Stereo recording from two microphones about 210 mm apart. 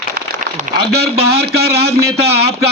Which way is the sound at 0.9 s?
50° right (ahead or behind).